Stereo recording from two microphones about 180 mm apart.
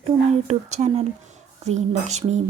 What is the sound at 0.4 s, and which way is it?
Speech, 40° right (ahead or behind).